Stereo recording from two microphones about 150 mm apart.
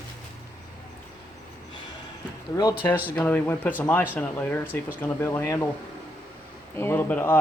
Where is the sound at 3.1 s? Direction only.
10° left (ahead or behind).